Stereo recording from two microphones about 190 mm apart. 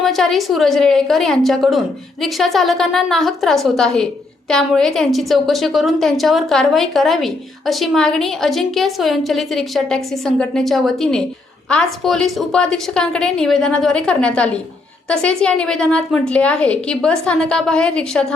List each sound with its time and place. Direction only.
0.0 s a woman's voice: centre (ahead or behind)